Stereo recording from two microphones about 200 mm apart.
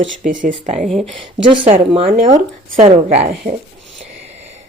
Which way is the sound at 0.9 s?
Centre (ahead or behind).